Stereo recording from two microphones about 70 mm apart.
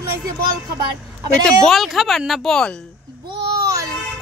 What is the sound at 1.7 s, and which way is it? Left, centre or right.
Speech, centre.